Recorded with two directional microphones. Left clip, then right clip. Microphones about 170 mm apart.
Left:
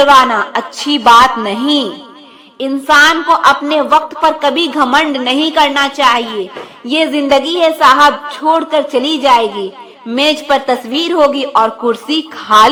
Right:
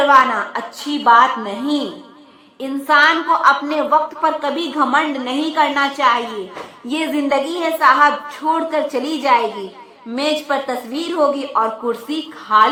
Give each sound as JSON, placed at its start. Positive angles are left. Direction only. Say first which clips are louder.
{"t": 0.1, "sound": "a woman's voice", "louder": "left 5 dB", "side_deg": 35}
{"t": 6.8, "sound": "a woman's voice", "louder": "left 7 dB", "side_deg": 25}